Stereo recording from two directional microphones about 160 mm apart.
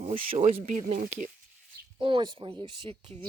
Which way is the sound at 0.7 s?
50° right (ahead or behind).